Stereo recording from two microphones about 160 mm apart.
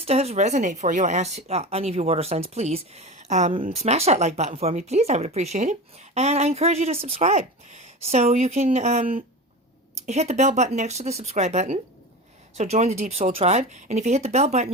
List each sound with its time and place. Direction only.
0.0 s speech: 40° right (ahead or behind)